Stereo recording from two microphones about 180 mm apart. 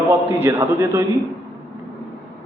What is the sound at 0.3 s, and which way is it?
Speech, 15° right (ahead or behind).